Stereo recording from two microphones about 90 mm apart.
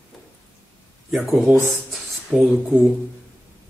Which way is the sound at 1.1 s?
5° right (ahead or behind).